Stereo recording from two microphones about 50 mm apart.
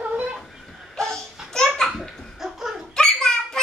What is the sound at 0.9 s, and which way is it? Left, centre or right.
Laughter, centre.